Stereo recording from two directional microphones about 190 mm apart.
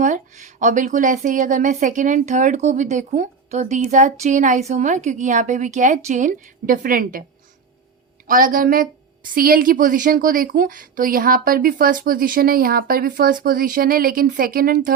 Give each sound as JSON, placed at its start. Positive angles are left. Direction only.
{"t": 0.0, "sound": "a woman's voice", "side_deg": -40}
{"t": 8.3, "sound": "speech", "side_deg": -45}